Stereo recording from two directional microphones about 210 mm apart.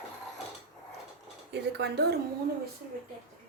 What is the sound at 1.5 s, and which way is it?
Speech, 55° right (ahead or behind).